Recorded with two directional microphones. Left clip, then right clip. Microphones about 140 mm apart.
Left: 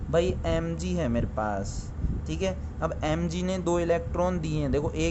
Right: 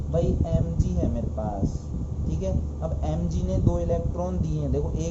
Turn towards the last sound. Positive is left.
turn(degrees=90)